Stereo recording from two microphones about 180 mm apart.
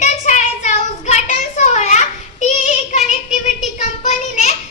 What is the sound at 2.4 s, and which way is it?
Child singing, 40° left (ahead or behind).